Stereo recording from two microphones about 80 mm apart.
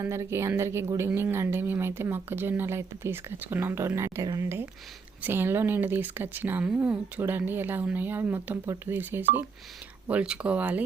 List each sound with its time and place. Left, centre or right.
0.0 s speech: right; by 10.8 s centre